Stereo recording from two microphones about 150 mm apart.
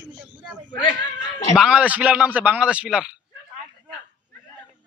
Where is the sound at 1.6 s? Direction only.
5° right (ahead or behind).